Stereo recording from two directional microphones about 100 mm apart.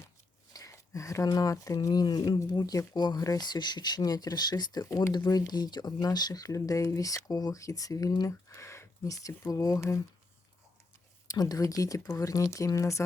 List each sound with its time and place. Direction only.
0.5 s speech: 35° left (ahead or behind)
11.3 s speech: 35° left (ahead or behind)